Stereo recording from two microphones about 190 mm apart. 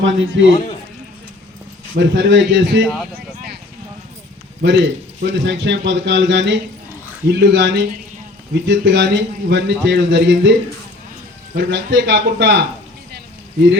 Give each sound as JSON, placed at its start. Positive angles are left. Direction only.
{"t": 0.0, "sound": "a man's voice", "side_deg": -75}
{"t": 2.0, "sound": "a man's voice", "side_deg": -70}
{"t": 4.6, "sound": "a man's voice", "side_deg": -65}
{"t": 11.5, "sound": "a man's voice", "side_deg": -65}